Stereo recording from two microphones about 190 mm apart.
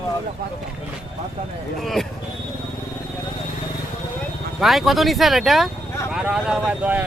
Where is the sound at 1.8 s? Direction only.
Centre (ahead or behind).